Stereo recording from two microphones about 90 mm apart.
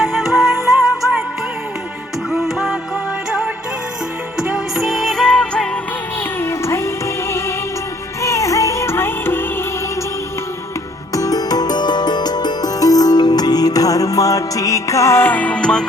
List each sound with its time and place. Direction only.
0.0 s music: centre (ahead or behind)
2.3 s music: 5° right (ahead or behind)
6.4 s music: 30° left (ahead or behind)
11.1 s music: 40° left (ahead or behind); by 15.9 s 10° left (ahead or behind)